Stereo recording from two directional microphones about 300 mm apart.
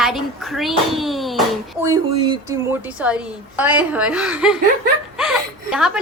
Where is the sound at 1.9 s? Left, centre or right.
Centre.